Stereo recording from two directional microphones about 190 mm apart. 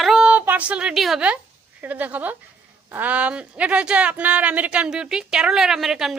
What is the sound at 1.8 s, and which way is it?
Speech, 10° right (ahead or behind).